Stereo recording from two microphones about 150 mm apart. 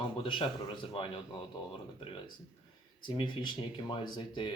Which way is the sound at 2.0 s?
35° left (ahead or behind).